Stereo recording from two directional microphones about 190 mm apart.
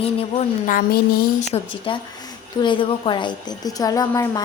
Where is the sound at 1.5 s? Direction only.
25° left (ahead or behind).